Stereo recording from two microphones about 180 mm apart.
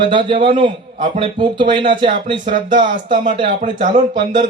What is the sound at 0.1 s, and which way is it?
A man's voice, 30° right (ahead or behind).